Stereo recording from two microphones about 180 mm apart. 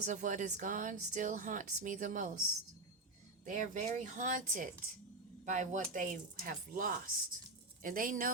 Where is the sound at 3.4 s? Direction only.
45° right (ahead or behind).